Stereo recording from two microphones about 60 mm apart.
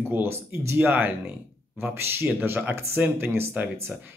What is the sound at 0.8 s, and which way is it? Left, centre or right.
Speech, right.